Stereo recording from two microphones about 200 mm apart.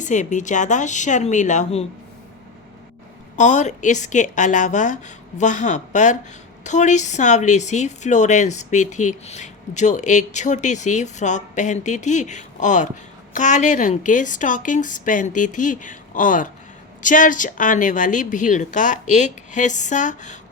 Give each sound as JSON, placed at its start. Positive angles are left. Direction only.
{"t": 0.0, "sound": "speech", "side_deg": 40}
{"t": 3.3, "sound": "speech", "side_deg": 35}